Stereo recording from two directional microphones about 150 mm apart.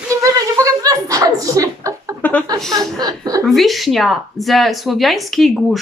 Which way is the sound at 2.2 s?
10° left (ahead or behind).